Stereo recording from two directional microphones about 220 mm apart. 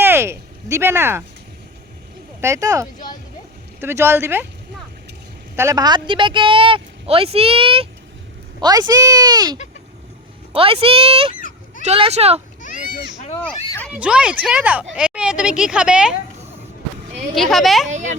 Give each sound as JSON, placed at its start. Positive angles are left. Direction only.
{"t": 0.0, "sound": "a sound", "side_deg": -10}
{"t": 2.4, "sound": "speech", "side_deg": -15}
{"t": 5.5, "sound": "speech", "side_deg": -15}
{"t": 11.3, "sound": "goat", "side_deg": 35}
{"t": 11.8, "sound": "speech", "side_deg": -25}
{"t": 12.6, "sound": "a sound", "side_deg": 40}
{"t": 13.4, "sound": "a sound", "side_deg": 5}
{"t": 13.9, "sound": "speech", "side_deg": -5}
{"t": 17.3, "sound": "speech", "side_deg": 0}
{"t": 17.8, "sound": "speech", "side_deg": -35}